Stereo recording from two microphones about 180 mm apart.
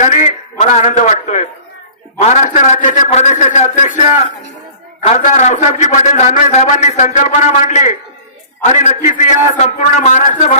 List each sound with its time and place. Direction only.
0.0 s a man's voice: 40° left (ahead or behind)